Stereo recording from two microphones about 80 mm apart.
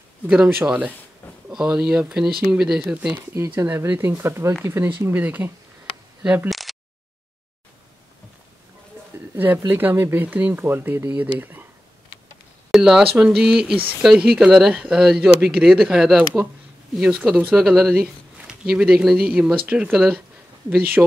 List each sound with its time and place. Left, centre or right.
0.3 s speech: centre
1.5 s speech: centre
2.8 s speech: right
3.9 s speech: right
4.2 s speech: right
6.5 s a sound: centre
9.3 s speech: right
12.7 s speech: centre